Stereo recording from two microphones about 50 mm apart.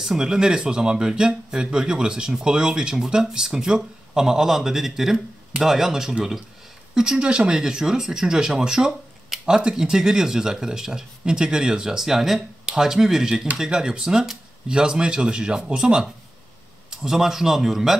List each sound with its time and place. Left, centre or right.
0.0 s speech: centre